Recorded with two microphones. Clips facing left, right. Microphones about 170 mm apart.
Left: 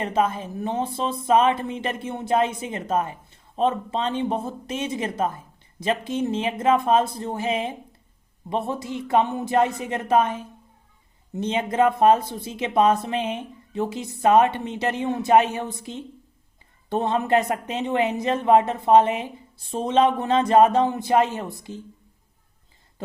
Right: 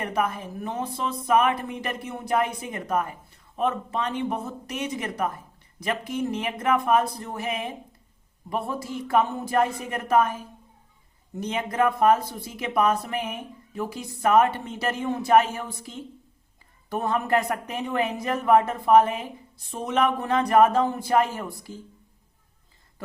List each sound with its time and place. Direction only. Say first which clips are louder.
0.0 s speech: left 4 dB; 25° left (ahead or behind)